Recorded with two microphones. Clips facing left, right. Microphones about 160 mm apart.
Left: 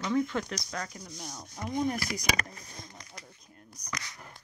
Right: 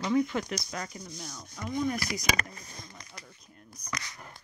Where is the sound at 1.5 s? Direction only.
40° left (ahead or behind).